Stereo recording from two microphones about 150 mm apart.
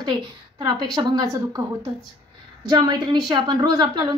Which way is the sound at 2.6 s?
30° right (ahead or behind).